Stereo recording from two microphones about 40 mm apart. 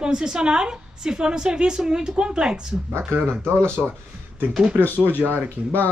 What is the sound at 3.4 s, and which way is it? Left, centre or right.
Speech, right.